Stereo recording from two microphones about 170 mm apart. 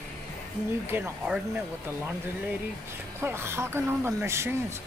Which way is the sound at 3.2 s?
15° right (ahead or behind).